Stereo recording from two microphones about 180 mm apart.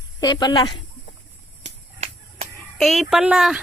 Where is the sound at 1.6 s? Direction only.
35° right (ahead or behind).